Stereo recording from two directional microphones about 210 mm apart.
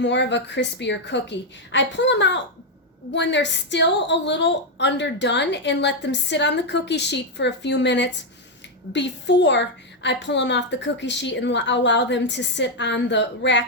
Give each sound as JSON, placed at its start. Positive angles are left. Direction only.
{"t": 0.0, "sound": "a woman's voice", "side_deg": 55}